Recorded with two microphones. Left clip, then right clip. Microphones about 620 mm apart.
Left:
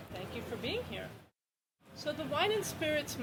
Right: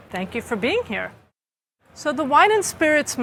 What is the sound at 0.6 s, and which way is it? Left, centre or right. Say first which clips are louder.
Speech: right 16 dB; right.